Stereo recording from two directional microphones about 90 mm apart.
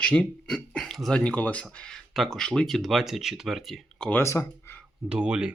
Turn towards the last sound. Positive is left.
turn(degrees=-10)  # may be behind; listen again after turning